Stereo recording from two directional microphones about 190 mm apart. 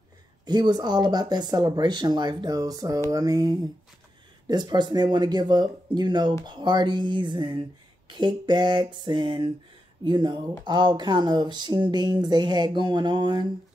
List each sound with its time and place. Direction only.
0.5 s speech: 20° right (ahead or behind)